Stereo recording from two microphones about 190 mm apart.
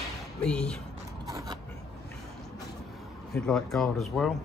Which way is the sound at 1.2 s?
20° right (ahead or behind).